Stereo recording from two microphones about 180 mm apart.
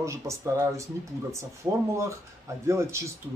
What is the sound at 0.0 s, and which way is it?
Speech, 15° right (ahead or behind).